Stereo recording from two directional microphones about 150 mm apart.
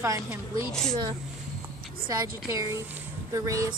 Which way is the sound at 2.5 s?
20° right (ahead or behind).